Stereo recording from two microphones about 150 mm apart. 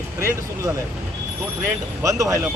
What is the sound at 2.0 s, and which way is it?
Speech, 20° right (ahead or behind).